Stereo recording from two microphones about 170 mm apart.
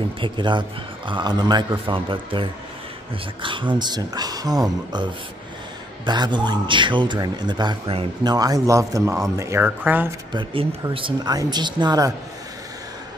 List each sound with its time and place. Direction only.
0.2 s a man's voice: 30° right (ahead or behind)
3.4 s a man's voice: 30° right (ahead or behind); by 10.0 s 10° right (ahead or behind)
10.3 s a man's voice: 30° right (ahead or behind)